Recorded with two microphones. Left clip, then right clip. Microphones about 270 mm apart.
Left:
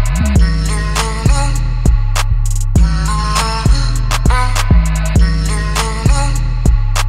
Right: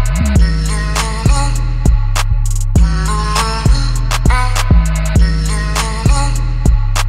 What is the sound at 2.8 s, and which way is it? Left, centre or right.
Music, right.